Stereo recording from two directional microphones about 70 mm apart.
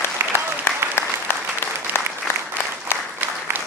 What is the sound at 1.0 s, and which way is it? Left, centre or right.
Applause, left.